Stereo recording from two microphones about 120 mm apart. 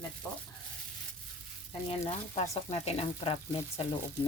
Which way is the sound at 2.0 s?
65° left (ahead or behind).